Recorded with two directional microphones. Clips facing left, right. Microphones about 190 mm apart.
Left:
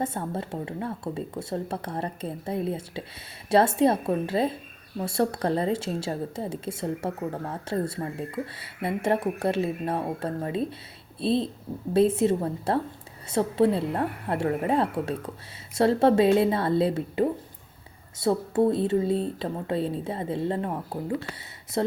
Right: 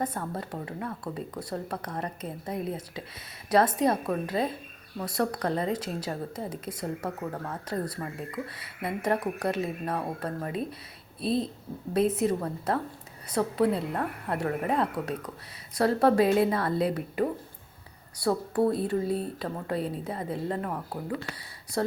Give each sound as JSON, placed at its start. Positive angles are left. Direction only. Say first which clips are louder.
{"t": 0.0, "sound": "speech", "louder": "left 2 dB", "side_deg": 25}